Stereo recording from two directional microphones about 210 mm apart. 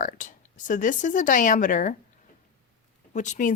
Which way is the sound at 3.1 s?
35° left (ahead or behind).